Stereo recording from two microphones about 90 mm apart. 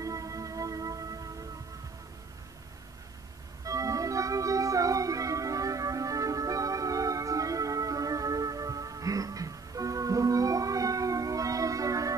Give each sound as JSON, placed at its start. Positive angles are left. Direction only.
{"t": 0.0, "sound": "music", "side_deg": -40}
{"t": 3.6, "sound": "music", "side_deg": -40}